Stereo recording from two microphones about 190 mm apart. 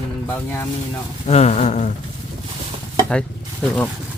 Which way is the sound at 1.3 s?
35° left (ahead or behind).